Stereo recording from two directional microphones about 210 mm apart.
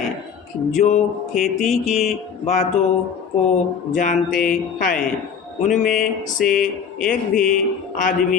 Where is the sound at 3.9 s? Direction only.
40° left (ahead or behind).